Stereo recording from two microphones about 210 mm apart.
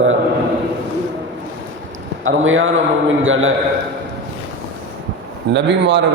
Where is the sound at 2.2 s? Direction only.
70° right (ahead or behind).